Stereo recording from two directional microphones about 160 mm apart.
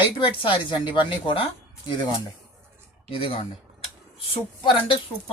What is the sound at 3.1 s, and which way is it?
Speech, 35° left (ahead or behind).